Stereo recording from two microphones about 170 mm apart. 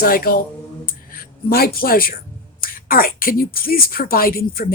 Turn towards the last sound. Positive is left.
turn(degrees=60)  # may be behind; listen again after turning